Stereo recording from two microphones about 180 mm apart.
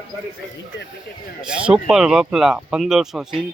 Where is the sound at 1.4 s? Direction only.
5° right (ahead or behind).